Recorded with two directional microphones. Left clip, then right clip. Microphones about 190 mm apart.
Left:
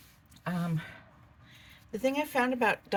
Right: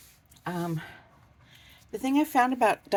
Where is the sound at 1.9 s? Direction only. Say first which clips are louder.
Right 3 dB; 55° right (ahead or behind).